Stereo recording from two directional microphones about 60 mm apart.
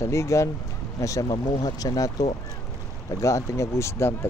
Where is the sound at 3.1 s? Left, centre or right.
Left.